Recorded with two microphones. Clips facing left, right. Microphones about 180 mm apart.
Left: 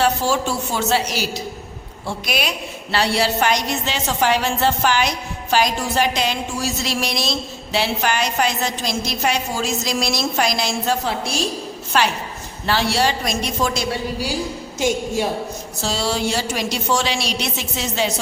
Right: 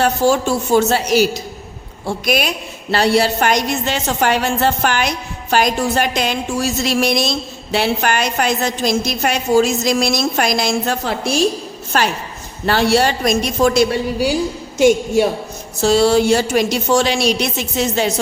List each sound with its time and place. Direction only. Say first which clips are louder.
0.0 s a woman's voice: right 4 dB; 50° right (ahead or behind)